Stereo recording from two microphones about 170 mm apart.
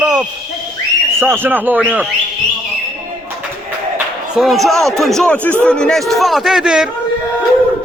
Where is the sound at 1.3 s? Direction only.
10° right (ahead or behind).